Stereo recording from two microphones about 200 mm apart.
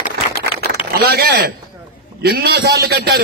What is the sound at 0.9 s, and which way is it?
A man's voice, 50° right (ahead or behind).